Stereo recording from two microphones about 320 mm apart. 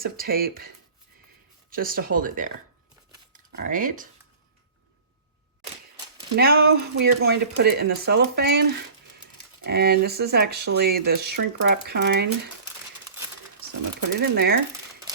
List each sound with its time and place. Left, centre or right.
0.0 s speech: right
1.7 s speech: right
6.3 s speech: right
9.6 s speech: right
14.2 s speech: right